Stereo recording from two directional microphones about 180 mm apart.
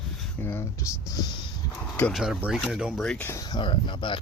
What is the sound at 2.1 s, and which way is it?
Speech, 5° right (ahead or behind).